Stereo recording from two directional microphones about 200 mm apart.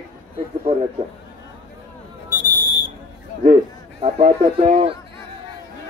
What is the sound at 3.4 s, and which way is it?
A man's voice, 30° right (ahead or behind).